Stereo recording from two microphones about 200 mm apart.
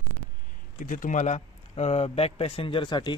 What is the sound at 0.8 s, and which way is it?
Speech, 40° left (ahead or behind).